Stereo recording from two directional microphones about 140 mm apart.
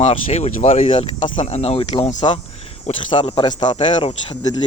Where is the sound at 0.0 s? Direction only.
50° left (ahead or behind).